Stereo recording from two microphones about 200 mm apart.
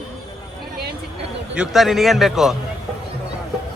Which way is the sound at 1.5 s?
Centre (ahead or behind).